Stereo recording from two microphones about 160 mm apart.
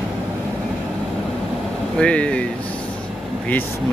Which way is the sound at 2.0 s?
5° left (ahead or behind).